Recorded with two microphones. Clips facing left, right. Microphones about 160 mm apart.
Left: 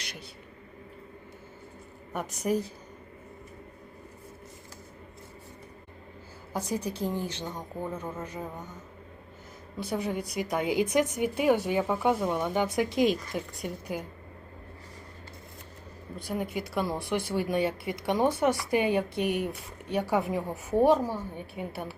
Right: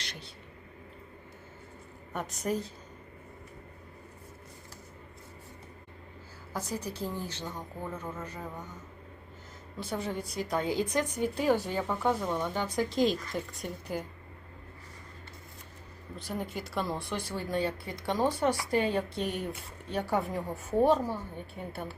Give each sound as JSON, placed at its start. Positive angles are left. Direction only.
{"t": 2.5, "sound": "a woman's voice", "side_deg": 10}
{"t": 6.5, "sound": "a woman's voice", "side_deg": 15}
{"t": 9.8, "sound": "a woman's voice", "side_deg": 15}
{"t": 16.1, "sound": "a woman's voice", "side_deg": 10}